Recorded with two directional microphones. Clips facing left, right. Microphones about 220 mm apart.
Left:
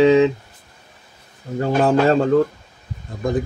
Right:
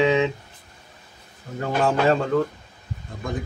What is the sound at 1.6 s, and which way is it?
Speech, 35° left (ahead or behind).